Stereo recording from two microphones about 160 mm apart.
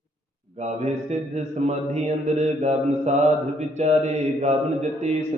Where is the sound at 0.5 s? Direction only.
45° right (ahead or behind).